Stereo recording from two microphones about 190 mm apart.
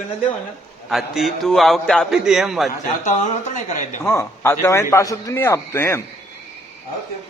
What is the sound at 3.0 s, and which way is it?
Speech, 40° left (ahead or behind).